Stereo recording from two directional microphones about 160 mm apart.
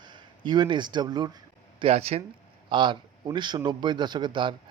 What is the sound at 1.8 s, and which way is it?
Speech, 40° right (ahead or behind).